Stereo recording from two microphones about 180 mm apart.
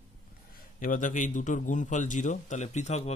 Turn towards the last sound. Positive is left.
turn(degrees=35)  # may be behind; listen again after turning